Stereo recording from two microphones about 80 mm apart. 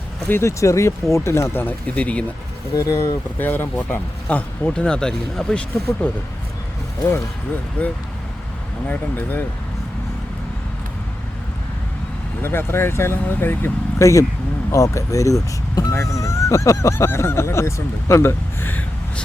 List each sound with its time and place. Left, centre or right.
0.3 s speech: left
1.6 s speech: centre
2.7 s speech: left
3.3 s speech: left
8.9 s speech: left
12.4 s speech: left
14.0 s speech: left